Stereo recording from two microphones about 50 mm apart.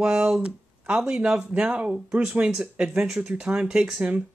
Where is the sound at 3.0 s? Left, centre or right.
Centre.